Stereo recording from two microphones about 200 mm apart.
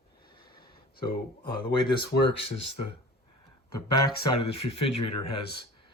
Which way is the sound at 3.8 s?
20° left (ahead or behind).